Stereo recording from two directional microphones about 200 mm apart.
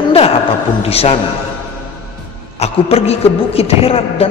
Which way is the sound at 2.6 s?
30° left (ahead or behind).